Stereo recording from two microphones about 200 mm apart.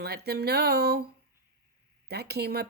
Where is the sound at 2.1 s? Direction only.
55° right (ahead or behind).